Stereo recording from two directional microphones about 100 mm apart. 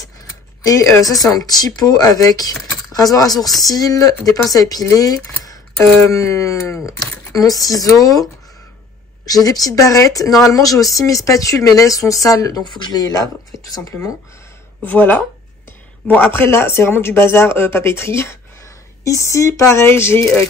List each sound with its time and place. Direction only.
0.7 s speech: 35° left (ahead or behind)
14.9 s speech: 15° left (ahead or behind)